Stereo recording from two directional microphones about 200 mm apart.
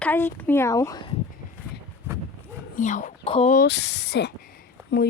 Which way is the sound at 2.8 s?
40° left (ahead or behind).